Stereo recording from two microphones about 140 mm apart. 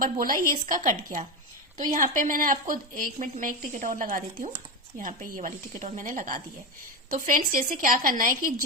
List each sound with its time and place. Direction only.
0.0 s speech: 90° right
0.6 s a woman's voice: 65° right (ahead or behind)
4.9 s a woman's voice: 75° right (ahead or behind)